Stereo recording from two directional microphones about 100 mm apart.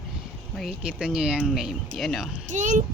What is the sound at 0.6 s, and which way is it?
Speech, 5° right (ahead or behind).